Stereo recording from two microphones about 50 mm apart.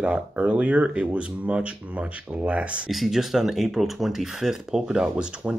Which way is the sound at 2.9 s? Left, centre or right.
Centre.